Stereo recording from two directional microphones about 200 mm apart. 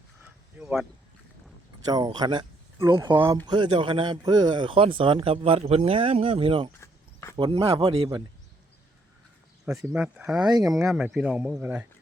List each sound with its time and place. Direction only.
0.6 s speech: centre (ahead or behind)
1.9 s speech: 20° right (ahead or behind)
6.7 s a sound: 15° left (ahead or behind)
7.3 s speech: 25° right (ahead or behind)
9.7 s speech: 5° right (ahead or behind)